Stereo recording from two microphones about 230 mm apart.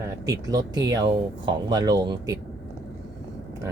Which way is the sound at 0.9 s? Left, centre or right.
Centre.